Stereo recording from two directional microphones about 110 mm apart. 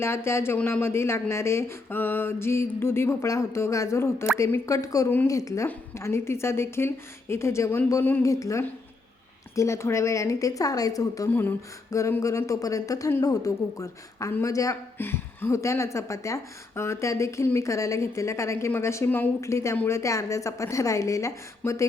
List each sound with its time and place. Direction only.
0.0 s a woman's voice: 20° left (ahead or behind)
5.0 s a woman's voice: 20° left (ahead or behind)
5.3 s a woman's voice: 30° left (ahead or behind)
11.3 s a woman's voice: 20° left (ahead or behind)
14.9 s a woman's voice: 20° left (ahead or behind)
19.7 s a woman's voice: 15° left (ahead or behind)
20.0 s a woman's voice: 30° left (ahead or behind)